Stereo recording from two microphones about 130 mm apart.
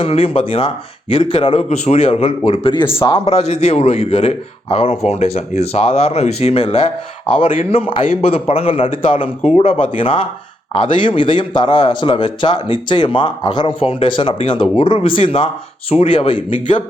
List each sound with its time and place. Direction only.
0.0 s a man's voice: 50° left (ahead or behind)
3.2 s a man's voice: 55° left (ahead or behind)